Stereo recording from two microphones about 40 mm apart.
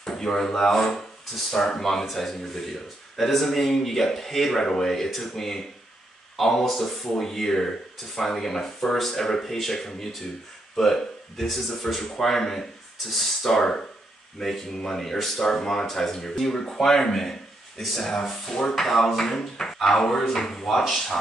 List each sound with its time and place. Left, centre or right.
0.0 s speech: centre